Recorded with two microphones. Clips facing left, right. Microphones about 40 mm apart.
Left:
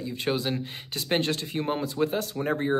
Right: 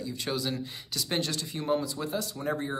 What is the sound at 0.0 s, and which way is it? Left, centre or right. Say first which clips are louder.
Speech: left 4 dB; left.